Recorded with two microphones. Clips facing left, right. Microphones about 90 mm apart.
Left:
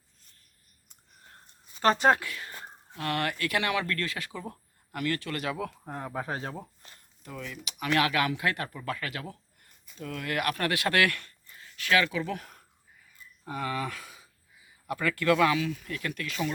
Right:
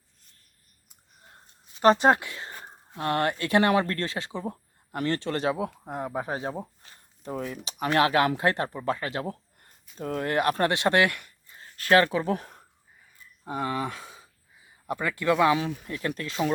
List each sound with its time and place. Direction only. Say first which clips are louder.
1.8 s speech: right 4 dB; 20° right (ahead or behind)
5.8 s speech: right 4 dB; 15° right (ahead or behind)
7.2 s speech: right 7 dB; 35° right (ahead or behind); by 11.5 s 15° right (ahead or behind)
11.5 s speech: right 6 dB; 40° right (ahead or behind)